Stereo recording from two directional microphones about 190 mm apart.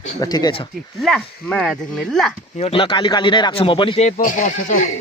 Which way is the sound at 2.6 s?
30° left (ahead or behind).